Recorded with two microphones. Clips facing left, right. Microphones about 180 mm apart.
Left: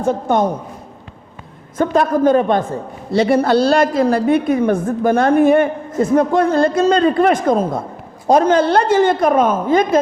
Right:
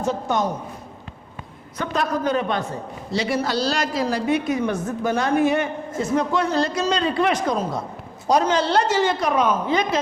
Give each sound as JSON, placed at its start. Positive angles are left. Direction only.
{"t": 0.0, "sound": "a man's voice", "side_deg": 55}
{"t": 1.8, "sound": "a man's voice", "side_deg": 50}